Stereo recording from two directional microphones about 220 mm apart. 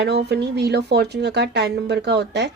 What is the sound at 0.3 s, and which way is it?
A woman's voice, 50° right (ahead or behind).